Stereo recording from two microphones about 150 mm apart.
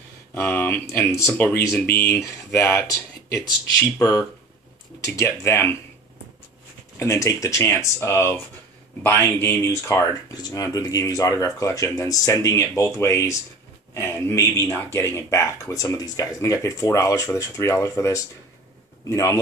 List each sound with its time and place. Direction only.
0.3 s speech: 15° left (ahead or behind)
5.0 s speech: 20° left (ahead or behind)
7.0 s speech: 20° left (ahead or behind)